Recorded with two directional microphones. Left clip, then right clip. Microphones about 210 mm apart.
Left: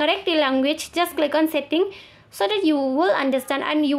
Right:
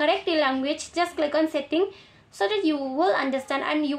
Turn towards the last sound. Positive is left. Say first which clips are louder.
# left 4 dB
turn(degrees=35)  # may be behind; listen again after turning